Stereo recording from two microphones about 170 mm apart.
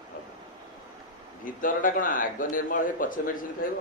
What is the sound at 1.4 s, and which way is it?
A man's voice, 55° left (ahead or behind).